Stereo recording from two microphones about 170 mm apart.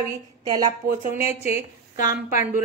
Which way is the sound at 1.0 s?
35° left (ahead or behind).